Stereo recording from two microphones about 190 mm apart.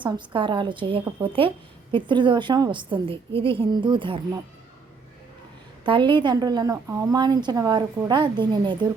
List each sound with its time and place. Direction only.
0.0 s a woman's voice: 25° right (ahead or behind)
5.8 s a woman's voice: 25° right (ahead or behind)